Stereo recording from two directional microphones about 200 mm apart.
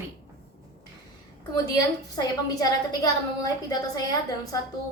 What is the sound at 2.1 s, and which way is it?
A woman's voice, 20° left (ahead or behind).